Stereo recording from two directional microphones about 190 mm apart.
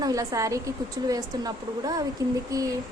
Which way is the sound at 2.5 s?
20° right (ahead or behind).